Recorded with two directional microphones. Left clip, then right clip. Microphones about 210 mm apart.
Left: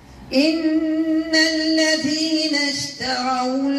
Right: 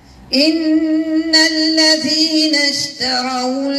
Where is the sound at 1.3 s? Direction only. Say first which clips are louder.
Right 6 dB; 35° right (ahead or behind).